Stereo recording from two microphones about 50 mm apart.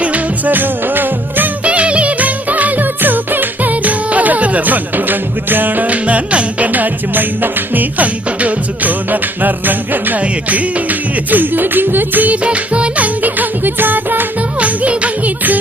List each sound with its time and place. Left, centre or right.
0.0 s music: right
1.6 s music: right
13.2 s music: right